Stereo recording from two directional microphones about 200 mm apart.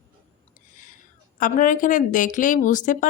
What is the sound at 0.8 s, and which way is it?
A woman's voice, 40° left (ahead or behind).